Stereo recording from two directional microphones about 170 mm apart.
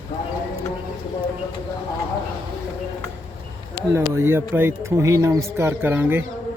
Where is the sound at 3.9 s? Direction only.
15° right (ahead or behind).